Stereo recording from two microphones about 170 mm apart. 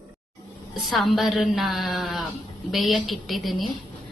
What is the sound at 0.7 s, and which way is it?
A woman's voice, centre (ahead or behind).